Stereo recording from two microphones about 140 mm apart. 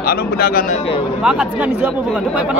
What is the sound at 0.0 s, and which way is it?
Speech, 90° left.